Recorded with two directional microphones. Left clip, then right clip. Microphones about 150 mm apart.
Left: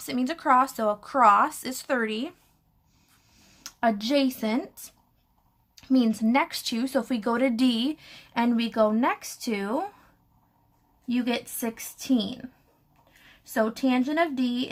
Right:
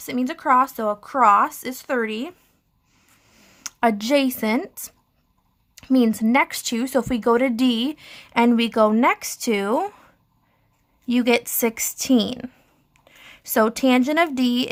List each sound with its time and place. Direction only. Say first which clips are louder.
0.0 s speech: right 3 dB; 30° right (ahead or behind)
3.2 s speech: right 8 dB; 50° right (ahead or behind)
11.1 s a woman's voice: right 9 dB; 45° right (ahead or behind)